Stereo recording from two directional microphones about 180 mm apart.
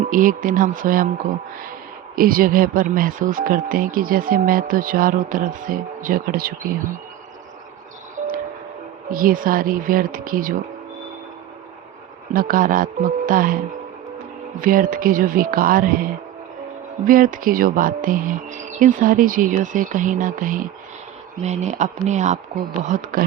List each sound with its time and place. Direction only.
0.0 s speech: 50° right (ahead or behind)
2.1 s speech: 50° right (ahead or behind)
9.1 s speech: 50° right (ahead or behind)
12.3 s speech: 50° right (ahead or behind)
14.6 s speech: 50° right (ahead or behind)